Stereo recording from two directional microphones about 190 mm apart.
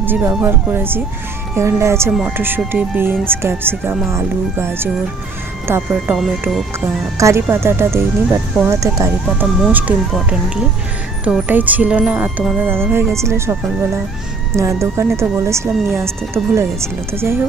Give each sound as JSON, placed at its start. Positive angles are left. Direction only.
{"t": 0.0, "sound": "speech", "side_deg": -10}
{"t": 7.2, "sound": "speech", "side_deg": -15}
{"t": 17.1, "sound": "speech", "side_deg": -15}